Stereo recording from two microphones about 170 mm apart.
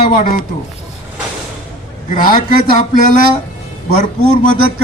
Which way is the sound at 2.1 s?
55° left (ahead or behind).